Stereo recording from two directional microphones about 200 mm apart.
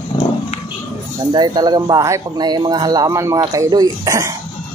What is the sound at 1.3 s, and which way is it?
Speech, 20° right (ahead or behind).